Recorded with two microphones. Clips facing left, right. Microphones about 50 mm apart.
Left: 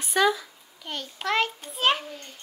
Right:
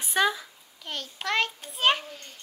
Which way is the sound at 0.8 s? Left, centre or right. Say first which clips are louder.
Left 2 dB; centre.